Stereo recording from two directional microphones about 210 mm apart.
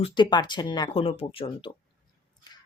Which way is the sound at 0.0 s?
20° left (ahead or behind).